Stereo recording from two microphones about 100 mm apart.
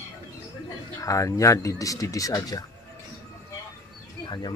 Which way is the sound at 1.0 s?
35° left (ahead or behind).